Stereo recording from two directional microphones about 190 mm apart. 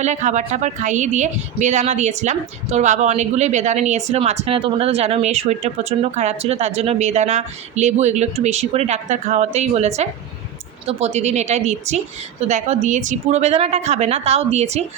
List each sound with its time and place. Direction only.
0.0 s a woman's voice: 40° right (ahead or behind)